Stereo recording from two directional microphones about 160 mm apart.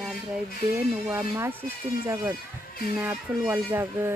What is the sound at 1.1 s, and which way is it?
Speech, 15° right (ahead or behind).